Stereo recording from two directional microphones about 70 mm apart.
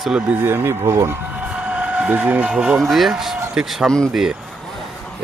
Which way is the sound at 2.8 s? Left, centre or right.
Centre.